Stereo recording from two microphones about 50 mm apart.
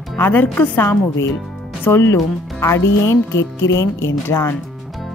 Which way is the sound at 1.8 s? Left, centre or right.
Left.